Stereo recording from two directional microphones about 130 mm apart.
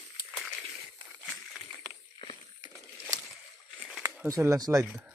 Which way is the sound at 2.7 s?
20° right (ahead or behind).